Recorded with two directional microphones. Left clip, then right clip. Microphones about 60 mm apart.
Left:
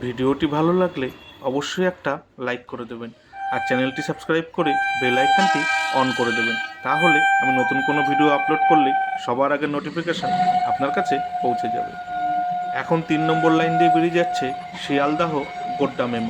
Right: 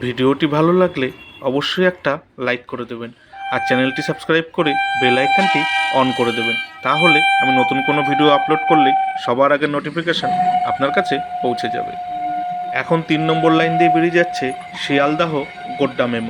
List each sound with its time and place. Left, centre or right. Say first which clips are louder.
0.0 s speech: right 5 dB; right
5.4 s speech: right 3 dB; centre
6.8 s speech: right 4 dB; right
7.4 s speech: right 4 dB; right
10.2 s speech: right 2 dB; centre
10.7 s speech: right 3 dB; right